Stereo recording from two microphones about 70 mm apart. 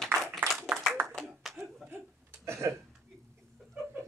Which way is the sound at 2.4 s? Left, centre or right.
Right.